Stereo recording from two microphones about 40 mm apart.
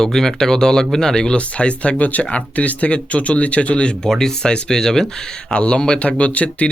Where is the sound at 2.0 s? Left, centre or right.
Left.